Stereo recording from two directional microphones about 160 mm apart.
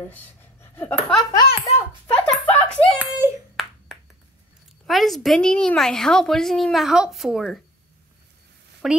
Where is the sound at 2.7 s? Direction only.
5° left (ahead or behind).